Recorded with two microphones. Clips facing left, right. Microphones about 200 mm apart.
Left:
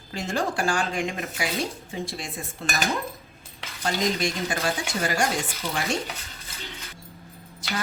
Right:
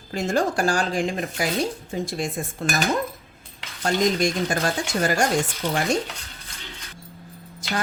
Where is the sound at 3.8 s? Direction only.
45° right (ahead or behind).